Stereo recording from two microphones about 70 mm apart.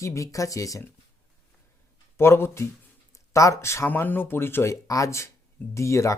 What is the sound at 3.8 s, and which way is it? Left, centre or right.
Speech, left.